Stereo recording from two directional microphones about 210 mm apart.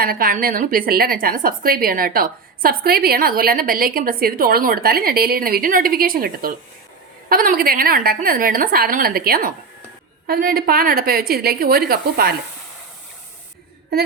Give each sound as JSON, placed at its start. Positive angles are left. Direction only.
{"t": 0.0, "sound": "a woman's voice", "side_deg": -45}